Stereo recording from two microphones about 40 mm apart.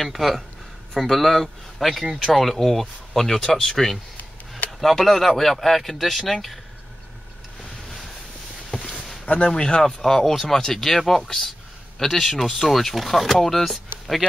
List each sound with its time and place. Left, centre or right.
0.0 s speech: centre
8.6 s a sound: centre
9.2 s speech: left; by 14.2 s centre